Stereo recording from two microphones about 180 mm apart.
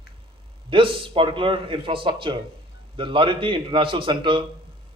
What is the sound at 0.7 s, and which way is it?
A man's voice, 30° right (ahead or behind).